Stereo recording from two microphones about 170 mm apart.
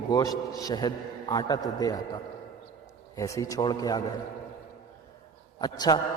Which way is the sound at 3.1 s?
20° left (ahead or behind).